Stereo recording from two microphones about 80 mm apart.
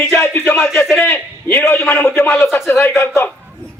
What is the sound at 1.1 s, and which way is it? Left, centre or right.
A man's voice, left.